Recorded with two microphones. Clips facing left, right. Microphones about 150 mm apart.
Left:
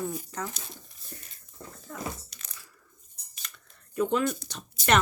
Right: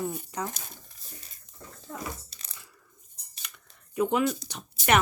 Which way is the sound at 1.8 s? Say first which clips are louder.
Even; 30° right (ahead or behind).